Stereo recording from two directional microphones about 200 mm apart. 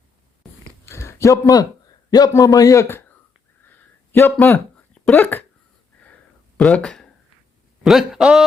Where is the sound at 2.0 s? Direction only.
20° left (ahead or behind).